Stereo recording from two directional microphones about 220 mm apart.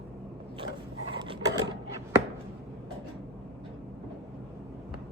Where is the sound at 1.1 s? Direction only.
20° right (ahead or behind).